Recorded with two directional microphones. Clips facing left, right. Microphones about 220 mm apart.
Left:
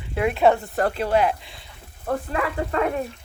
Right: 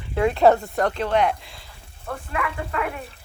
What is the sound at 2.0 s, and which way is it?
Speech, 35° left (ahead or behind).